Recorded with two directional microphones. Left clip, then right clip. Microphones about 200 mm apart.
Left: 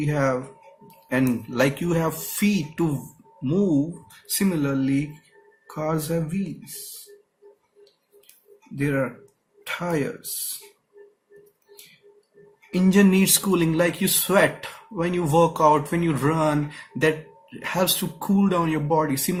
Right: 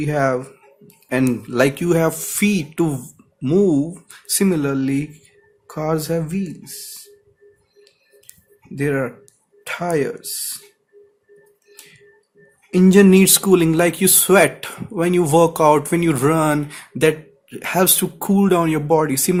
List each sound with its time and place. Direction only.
0.0 s speech: 50° right (ahead or behind)
8.8 s speech: 50° right (ahead or behind)
12.7 s speech: 50° right (ahead or behind)